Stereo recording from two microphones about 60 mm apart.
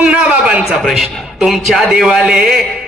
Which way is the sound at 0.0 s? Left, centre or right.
Right.